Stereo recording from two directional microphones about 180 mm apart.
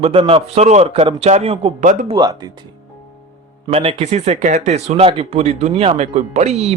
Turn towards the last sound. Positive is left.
turn(degrees=-35)  # may be behind; listen again after turning